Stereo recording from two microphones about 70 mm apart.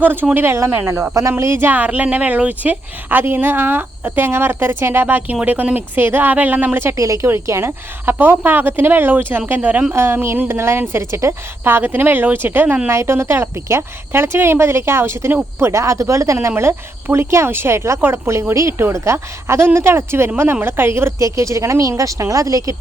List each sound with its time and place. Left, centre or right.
0.0 s a woman's voice: right
12.9 s a woman's voice: right
21.2 s speech: right